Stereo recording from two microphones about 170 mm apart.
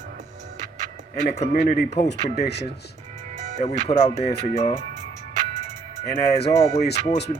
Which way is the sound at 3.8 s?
35° left (ahead or behind).